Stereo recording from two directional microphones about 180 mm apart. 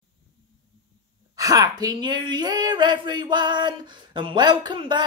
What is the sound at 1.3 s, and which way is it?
Speech, 20° right (ahead or behind).